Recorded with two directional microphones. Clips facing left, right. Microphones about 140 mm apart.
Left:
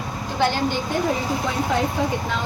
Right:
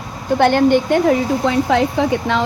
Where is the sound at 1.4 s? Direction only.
90° right.